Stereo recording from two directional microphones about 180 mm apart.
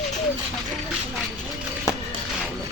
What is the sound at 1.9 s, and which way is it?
Music, 15° left (ahead or behind).